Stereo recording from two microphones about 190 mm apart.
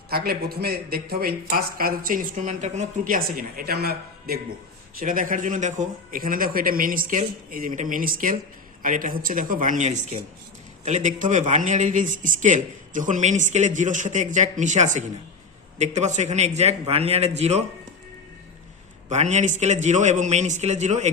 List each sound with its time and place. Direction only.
0.1 s a man's voice: 55° right (ahead or behind); by 17.6 s 35° right (ahead or behind)
19.0 s a man's voice: 35° right (ahead or behind)